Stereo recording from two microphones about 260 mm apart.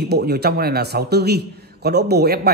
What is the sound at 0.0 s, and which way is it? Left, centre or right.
Speech, right.